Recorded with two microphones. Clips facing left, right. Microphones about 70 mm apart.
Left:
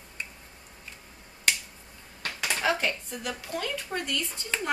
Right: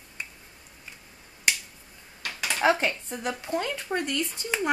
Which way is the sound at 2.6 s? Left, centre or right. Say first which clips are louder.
Right 5 dB; right.